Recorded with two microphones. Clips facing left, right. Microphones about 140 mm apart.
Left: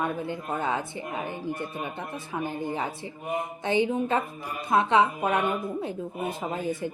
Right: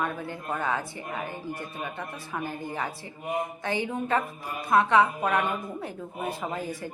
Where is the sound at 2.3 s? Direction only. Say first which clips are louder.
Left 4 dB; 20° left (ahead or behind).